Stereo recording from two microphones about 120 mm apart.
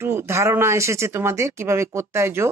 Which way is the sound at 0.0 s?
20° right (ahead or behind).